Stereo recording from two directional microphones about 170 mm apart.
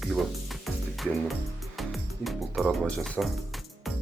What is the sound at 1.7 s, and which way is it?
Speech, centre (ahead or behind).